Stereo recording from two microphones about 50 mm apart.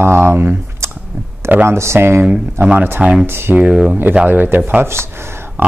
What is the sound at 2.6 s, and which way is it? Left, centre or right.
Speech, right.